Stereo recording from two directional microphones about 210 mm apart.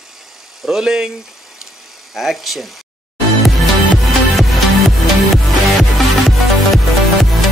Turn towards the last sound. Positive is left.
turn(degrees=0)  # may be behind; listen again after turning